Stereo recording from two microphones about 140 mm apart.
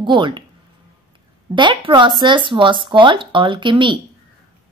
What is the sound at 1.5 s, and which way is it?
A woman's voice, 35° right (ahead or behind).